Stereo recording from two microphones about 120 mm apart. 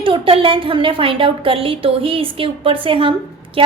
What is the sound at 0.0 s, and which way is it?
A woman's voice, 45° right (ahead or behind).